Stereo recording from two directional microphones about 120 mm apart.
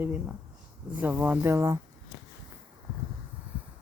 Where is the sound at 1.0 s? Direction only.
15° right (ahead or behind).